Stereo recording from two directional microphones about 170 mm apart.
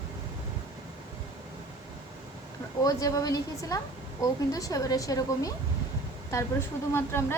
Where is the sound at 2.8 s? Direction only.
20° left (ahead or behind).